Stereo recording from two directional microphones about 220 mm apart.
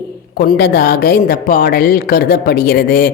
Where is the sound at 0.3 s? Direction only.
45° left (ahead or behind).